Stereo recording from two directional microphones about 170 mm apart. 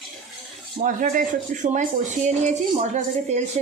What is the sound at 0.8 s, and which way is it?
Speech, 50° right (ahead or behind).